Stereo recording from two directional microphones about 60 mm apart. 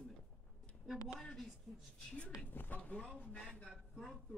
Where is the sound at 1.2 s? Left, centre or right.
Centre.